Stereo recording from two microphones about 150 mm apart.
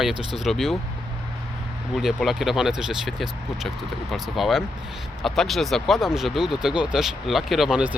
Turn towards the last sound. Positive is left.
turn(degrees=-5)  # may be behind; listen again after turning